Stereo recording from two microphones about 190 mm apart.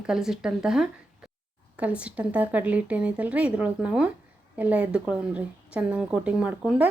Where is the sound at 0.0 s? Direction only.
5° right (ahead or behind).